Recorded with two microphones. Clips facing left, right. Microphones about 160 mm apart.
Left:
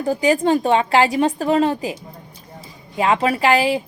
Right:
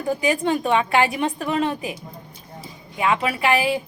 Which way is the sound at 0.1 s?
35° left (ahead or behind).